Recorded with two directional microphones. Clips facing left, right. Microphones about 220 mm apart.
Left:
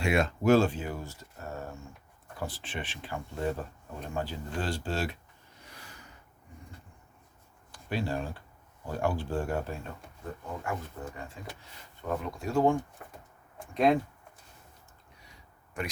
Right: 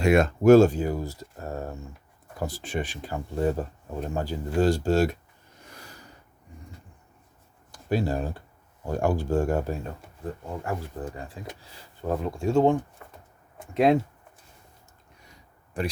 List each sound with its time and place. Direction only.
0.0 s speech: 45° right (ahead or behind)
5.6 s snort: 40° right (ahead or behind)
7.7 s speech: 40° right (ahead or behind)
11.0 s speech: 35° right (ahead or behind)
13.7 s speech: 25° right (ahead or behind)
15.8 s speech: 30° right (ahead or behind)